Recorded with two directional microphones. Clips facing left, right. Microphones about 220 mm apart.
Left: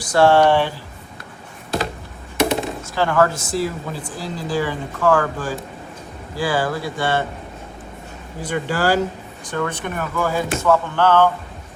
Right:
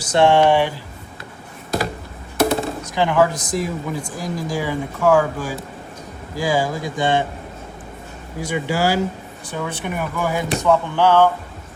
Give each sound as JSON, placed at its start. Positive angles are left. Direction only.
{"t": 0.1, "sound": "speech", "side_deg": -20}
{"t": 2.4, "sound": "a sound", "side_deg": 0}
{"t": 2.8, "sound": "speech", "side_deg": -15}
{"t": 8.4, "sound": "speech", "side_deg": -10}